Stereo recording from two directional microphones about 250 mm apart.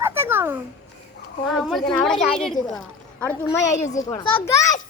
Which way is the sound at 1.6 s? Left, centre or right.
Centre.